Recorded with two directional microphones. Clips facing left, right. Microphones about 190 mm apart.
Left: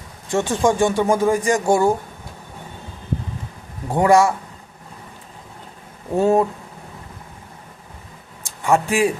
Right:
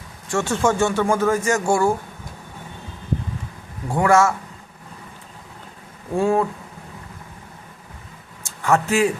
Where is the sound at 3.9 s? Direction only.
20° left (ahead or behind).